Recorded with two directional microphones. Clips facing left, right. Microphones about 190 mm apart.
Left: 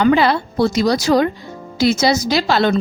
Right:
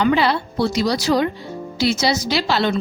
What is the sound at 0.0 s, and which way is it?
A woman's voice, 50° left (ahead or behind).